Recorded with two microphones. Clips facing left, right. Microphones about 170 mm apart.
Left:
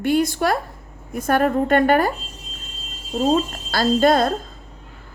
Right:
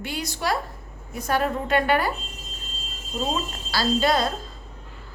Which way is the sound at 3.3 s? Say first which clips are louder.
Left 8 dB; 50° left (ahead or behind).